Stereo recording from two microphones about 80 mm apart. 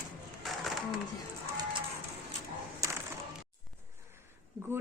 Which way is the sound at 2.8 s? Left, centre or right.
Right.